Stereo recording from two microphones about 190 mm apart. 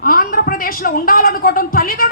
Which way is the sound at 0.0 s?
50° left (ahead or behind).